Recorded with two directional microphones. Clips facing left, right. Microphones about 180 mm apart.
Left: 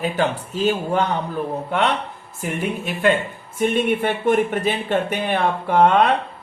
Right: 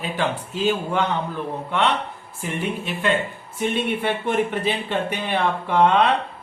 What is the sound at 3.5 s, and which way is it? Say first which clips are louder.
Speech: left 4 dB; 50° left (ahead or behind).